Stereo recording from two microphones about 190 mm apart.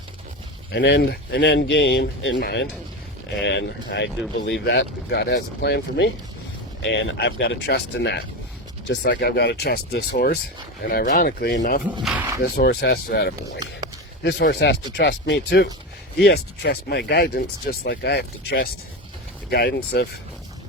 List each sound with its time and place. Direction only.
0.7 s speech: 65° left (ahead or behind)
12.0 s speech: 10° right (ahead or behind)
12.4 s speech: 55° left (ahead or behind)